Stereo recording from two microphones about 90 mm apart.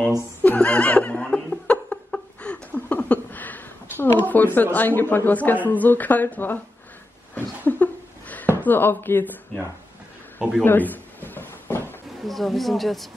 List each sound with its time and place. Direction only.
0.4 s laughter: 15° left (ahead or behind)
4.7 s speech: 20° left (ahead or behind)
7.3 s a sound: 20° left (ahead or behind)
8.6 s speech: 25° left (ahead or behind)
10.6 s a sound: 20° left (ahead or behind)
12.3 s speech: centre (ahead or behind)